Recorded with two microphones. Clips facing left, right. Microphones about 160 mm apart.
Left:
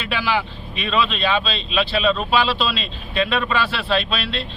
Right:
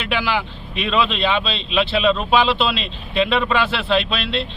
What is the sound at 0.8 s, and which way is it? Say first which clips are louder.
Speech: right 2 dB; 15° right (ahead or behind).